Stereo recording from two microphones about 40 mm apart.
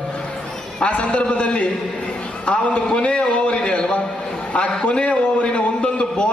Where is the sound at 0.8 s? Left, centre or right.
Left.